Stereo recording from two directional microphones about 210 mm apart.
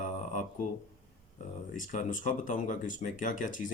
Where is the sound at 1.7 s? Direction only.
35° left (ahead or behind).